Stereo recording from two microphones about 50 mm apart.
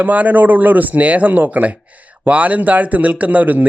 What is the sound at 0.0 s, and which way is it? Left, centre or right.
Speech, right.